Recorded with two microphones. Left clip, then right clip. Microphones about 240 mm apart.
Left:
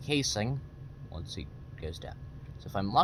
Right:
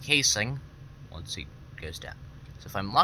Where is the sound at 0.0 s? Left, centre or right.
Centre.